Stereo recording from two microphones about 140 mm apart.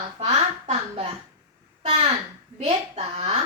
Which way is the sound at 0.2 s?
45° right (ahead or behind).